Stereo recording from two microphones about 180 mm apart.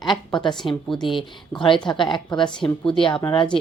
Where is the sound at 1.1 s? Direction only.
30° left (ahead or behind).